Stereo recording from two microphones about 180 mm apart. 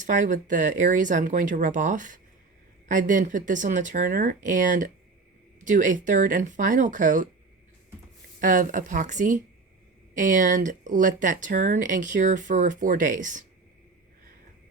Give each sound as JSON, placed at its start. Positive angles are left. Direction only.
{"t": 0.0, "sound": "speech", "side_deg": -45}
{"t": 8.4, "sound": "speech", "side_deg": -50}